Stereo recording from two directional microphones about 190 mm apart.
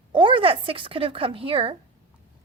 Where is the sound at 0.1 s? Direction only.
25° right (ahead or behind).